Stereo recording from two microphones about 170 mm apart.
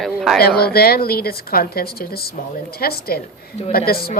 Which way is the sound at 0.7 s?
65° left (ahead or behind).